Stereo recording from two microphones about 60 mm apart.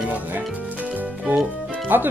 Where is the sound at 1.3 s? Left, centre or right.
Right.